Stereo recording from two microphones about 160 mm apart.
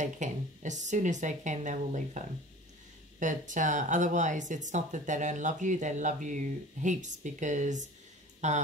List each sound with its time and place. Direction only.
0.0 s speech: 50° right (ahead or behind)